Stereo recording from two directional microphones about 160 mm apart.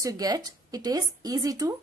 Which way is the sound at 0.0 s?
20° right (ahead or behind).